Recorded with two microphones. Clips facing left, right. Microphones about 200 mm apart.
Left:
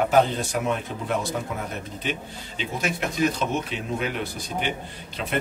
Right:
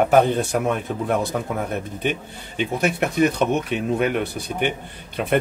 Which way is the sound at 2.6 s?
60° right (ahead or behind).